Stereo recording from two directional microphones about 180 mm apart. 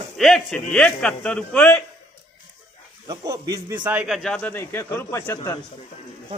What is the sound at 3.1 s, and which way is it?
Speech, 20° right (ahead or behind).